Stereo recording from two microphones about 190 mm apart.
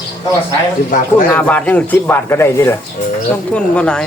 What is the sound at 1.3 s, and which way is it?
A man's voice, 10° left (ahead or behind).